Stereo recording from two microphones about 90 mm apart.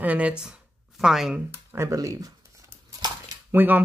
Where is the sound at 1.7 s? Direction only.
35° right (ahead or behind).